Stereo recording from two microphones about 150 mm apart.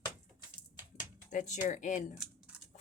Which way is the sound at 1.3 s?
60° left (ahead or behind).